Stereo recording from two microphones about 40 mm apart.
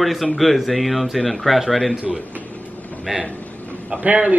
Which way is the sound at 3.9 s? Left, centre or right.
Right.